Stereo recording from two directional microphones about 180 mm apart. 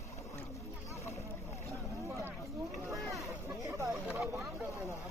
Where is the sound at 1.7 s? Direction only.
15° right (ahead or behind).